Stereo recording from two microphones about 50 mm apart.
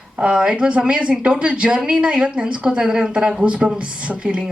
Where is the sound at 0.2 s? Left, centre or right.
Centre.